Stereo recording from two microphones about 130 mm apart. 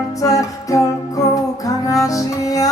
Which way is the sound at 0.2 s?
25° left (ahead or behind).